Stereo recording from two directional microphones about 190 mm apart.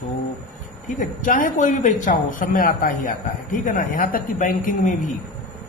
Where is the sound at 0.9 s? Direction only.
45° left (ahead or behind).